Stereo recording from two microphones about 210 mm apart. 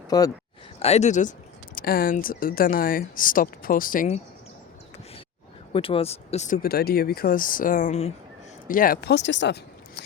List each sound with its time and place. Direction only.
0.1 s speech: 20° left (ahead or behind)
0.8 s speech: 30° left (ahead or behind)
5.7 s speech: 25° left (ahead or behind); by 10.0 s 55° left (ahead or behind)